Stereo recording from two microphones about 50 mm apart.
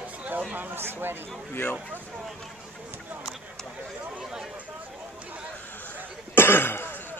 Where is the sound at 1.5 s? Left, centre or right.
Left.